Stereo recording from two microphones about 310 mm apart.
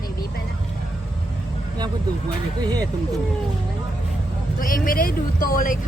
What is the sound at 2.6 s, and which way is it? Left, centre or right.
Speech, centre.